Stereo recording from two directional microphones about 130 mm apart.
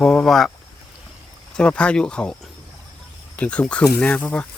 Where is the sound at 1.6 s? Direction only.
10° left (ahead or behind).